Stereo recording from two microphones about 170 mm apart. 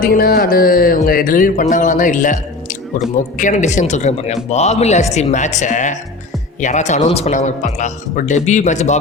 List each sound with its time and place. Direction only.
0.0 s music: 60° left (ahead or behind)
1.7 s a man's voice: 50° left (ahead or behind)